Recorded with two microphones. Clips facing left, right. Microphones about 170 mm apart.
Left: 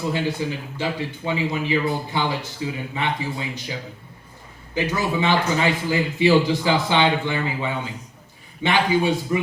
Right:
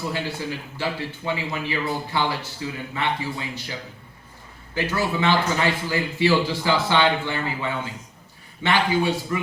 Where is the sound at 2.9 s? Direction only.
15° left (ahead or behind).